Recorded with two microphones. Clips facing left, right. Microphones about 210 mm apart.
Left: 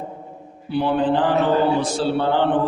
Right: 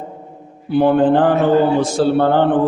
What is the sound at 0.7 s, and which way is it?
A man's voice, 50° right (ahead or behind).